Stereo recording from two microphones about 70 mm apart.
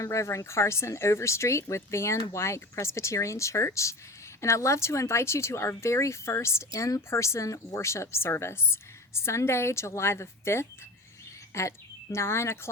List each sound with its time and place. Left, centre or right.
0.0 s speech: left